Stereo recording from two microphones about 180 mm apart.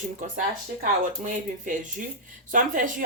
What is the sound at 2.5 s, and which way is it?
Speech, 45° right (ahead or behind).